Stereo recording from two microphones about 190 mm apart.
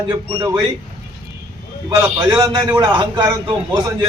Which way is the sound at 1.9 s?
20° right (ahead or behind).